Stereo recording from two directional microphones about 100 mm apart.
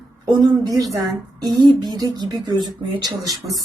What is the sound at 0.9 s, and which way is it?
Speech, 40° right (ahead or behind).